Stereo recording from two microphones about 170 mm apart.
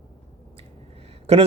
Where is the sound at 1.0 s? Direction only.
35° right (ahead or behind).